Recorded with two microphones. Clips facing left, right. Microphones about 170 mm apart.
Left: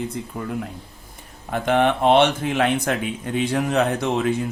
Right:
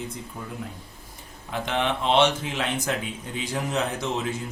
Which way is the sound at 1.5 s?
55° left (ahead or behind).